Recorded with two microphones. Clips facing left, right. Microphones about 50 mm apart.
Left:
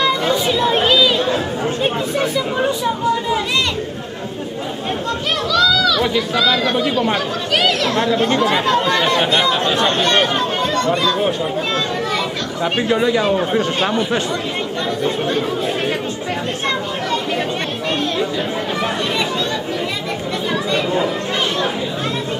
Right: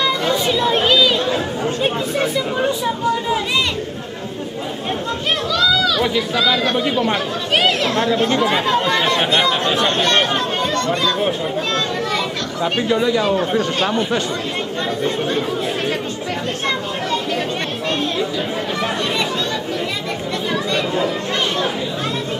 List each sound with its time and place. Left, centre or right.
0.0 s chatter: centre
5.5 s chatter: centre
6.0 s speech: centre
7.5 s speech: centre
7.9 s speech: centre
12.8 s speech: left
13.2 s speech: centre
15.0 s speech: centre
20.5 s chatter: centre